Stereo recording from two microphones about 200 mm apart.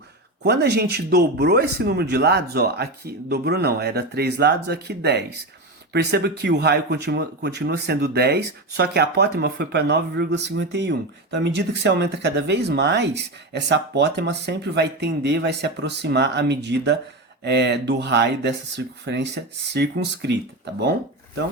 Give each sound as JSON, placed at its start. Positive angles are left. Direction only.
{"t": 0.4, "sound": "speech", "side_deg": -55}